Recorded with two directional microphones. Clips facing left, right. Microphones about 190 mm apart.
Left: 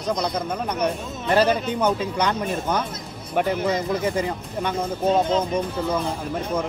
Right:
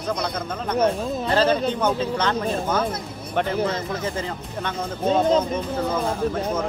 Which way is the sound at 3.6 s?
15° left (ahead or behind).